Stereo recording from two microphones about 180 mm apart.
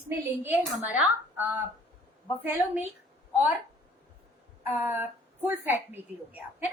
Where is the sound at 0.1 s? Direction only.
10° right (ahead or behind).